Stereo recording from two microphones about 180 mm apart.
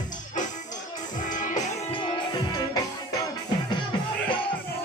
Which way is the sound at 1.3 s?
45° left (ahead or behind).